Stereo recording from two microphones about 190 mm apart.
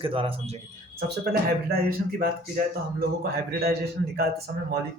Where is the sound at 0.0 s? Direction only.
30° right (ahead or behind).